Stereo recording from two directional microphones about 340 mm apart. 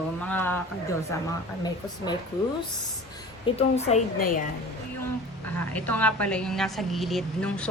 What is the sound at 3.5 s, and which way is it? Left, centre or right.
Speech, centre.